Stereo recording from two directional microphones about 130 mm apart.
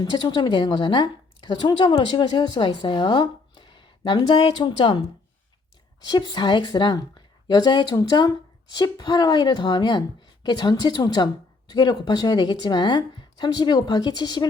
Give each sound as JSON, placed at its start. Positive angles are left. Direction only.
{"t": 0.0, "sound": "a woman's voice", "side_deg": 35}
{"t": 6.1, "sound": "a woman's voice", "side_deg": 35}